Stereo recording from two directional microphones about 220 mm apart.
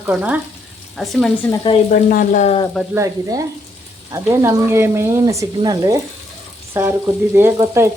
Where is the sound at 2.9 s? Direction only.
15° right (ahead or behind).